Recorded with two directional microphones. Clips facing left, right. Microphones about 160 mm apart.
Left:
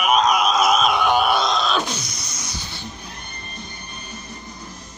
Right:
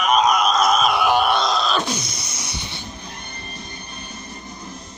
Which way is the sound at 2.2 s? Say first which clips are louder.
Right 1 dB; 30° right (ahead or behind).